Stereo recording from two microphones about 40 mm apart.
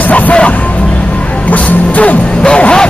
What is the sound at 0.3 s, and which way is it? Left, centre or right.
Music, left.